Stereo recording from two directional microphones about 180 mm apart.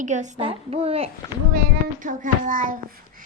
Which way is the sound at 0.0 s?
40° right (ahead or behind).